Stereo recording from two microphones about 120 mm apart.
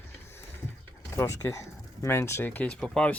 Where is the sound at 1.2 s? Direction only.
25° left (ahead or behind); by 3.1 s 10° left (ahead or behind).